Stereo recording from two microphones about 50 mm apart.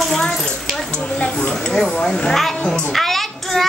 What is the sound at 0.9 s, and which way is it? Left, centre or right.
A child's voice, centre.